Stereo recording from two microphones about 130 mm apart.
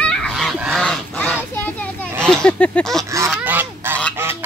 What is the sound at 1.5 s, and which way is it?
Children playing, 10° left (ahead or behind).